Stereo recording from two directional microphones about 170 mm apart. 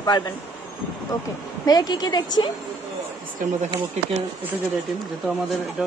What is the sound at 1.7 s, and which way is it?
Speech, 25° left (ahead or behind).